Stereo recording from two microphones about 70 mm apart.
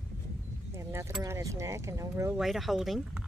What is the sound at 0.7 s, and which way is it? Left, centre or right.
Speech, right.